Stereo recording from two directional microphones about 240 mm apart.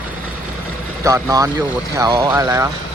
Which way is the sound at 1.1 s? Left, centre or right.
Centre.